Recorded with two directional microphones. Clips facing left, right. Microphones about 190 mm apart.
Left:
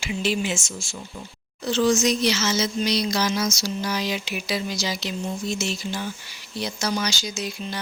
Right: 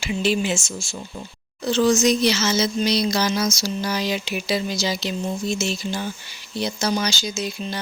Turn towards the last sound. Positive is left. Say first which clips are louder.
# right 3 dB
turn(degrees=-25)  # may be behind; listen again after turning